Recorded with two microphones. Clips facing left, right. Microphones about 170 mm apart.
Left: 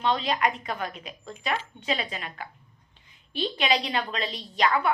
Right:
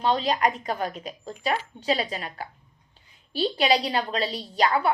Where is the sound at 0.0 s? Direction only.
35° right (ahead or behind).